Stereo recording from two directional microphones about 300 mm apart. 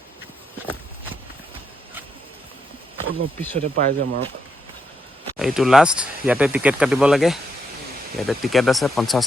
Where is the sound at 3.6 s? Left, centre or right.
Right.